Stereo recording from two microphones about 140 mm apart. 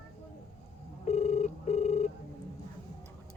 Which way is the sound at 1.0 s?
50° left (ahead or behind).